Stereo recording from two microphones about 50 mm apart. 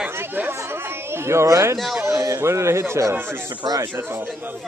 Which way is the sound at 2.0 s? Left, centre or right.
Right.